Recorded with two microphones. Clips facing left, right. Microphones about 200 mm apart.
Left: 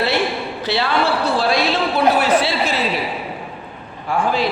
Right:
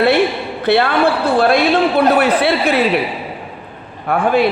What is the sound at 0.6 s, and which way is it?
A man's voice, 55° right (ahead or behind).